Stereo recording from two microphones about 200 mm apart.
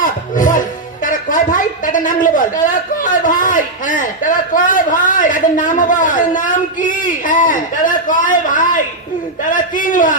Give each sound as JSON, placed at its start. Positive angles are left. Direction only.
{"t": 0.0, "sound": "music", "side_deg": 40}
{"t": 1.0, "sound": "a sound", "side_deg": 40}
{"t": 9.4, "sound": "a man's voice", "side_deg": 40}